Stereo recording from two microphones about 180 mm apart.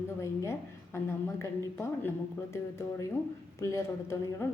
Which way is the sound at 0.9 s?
15° left (ahead or behind).